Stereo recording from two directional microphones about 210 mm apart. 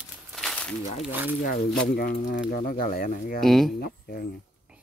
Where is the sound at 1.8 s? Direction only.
45° left (ahead or behind).